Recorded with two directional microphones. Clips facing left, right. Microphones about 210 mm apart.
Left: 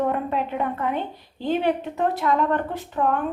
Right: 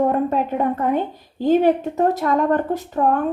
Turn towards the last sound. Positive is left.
turn(degrees=-40)  # may be behind; listen again after turning